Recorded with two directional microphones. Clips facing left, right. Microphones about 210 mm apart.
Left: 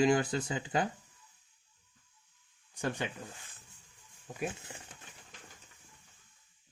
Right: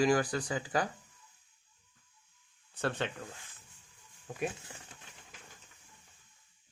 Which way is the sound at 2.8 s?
15° left (ahead or behind).